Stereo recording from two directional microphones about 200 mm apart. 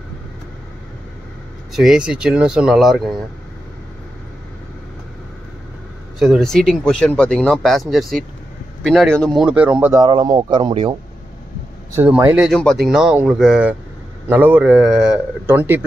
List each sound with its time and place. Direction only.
1.7 s speech: centre (ahead or behind)
6.1 s speech: centre (ahead or behind)
10.0 s speech: 20° right (ahead or behind)
11.9 s a man's voice: 10° right (ahead or behind)
12.4 s a man's voice: centre (ahead or behind)